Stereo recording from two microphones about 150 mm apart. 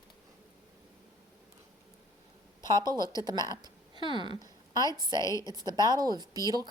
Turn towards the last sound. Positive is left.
turn(degrees=-25)  # may be behind; listen again after turning